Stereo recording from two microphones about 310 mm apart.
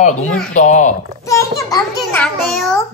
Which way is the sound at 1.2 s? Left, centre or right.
Centre.